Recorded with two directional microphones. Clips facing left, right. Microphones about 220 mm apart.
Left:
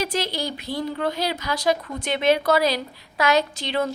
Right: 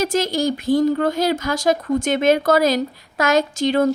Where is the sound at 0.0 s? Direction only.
45° right (ahead or behind).